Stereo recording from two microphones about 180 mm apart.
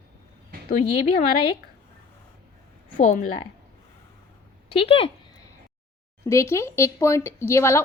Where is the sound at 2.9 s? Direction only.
45° left (ahead or behind).